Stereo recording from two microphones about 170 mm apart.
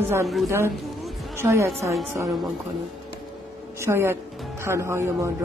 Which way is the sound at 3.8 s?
15° right (ahead or behind).